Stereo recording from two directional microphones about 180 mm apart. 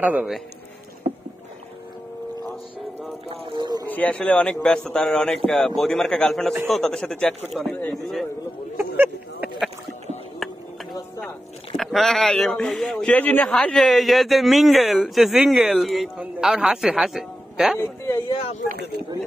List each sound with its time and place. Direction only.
0.0 s a man's voice: 10° right (ahead or behind)
3.3 s speech: 30° right (ahead or behind)
3.9 s speech: 10° left (ahead or behind)
8.7 s a sound: 10° right (ahead or behind)
11.2 s speech: centre (ahead or behind)
17.7 s speech: 15° left (ahead or behind)
18.3 s speech: 30° left (ahead or behind)
18.7 s speech: 65° right (ahead or behind)